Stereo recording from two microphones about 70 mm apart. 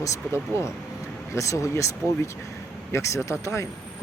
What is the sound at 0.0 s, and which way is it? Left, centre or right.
Speech, left.